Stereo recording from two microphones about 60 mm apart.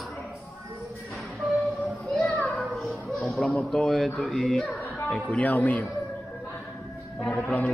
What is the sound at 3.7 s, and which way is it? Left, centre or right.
Speech, centre.